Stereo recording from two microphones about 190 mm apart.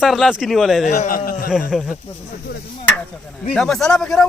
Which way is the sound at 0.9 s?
45° left (ahead or behind).